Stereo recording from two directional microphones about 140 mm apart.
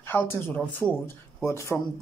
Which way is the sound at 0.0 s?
15° left (ahead or behind).